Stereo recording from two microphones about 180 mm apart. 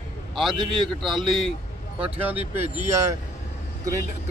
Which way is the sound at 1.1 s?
25° right (ahead or behind).